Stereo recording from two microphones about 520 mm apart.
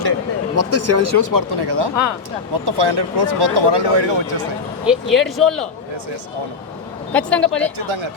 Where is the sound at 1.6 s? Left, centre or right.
Right.